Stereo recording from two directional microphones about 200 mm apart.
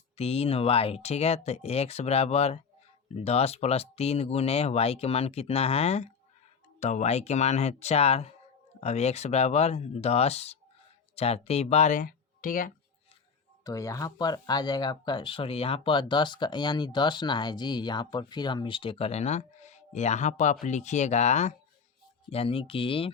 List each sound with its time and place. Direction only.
0.2 s speech: 30° left (ahead or behind)
13.7 s speech: 15° left (ahead or behind)